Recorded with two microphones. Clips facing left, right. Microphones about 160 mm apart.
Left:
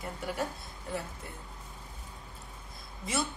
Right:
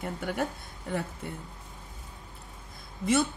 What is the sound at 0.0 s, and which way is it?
Speech, 55° right (ahead or behind).